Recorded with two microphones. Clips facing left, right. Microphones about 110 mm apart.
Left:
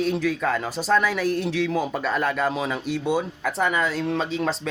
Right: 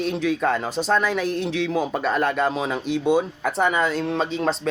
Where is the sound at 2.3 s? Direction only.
20° right (ahead or behind).